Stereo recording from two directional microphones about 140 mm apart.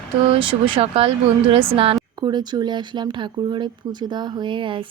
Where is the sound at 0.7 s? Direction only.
45° right (ahead or behind).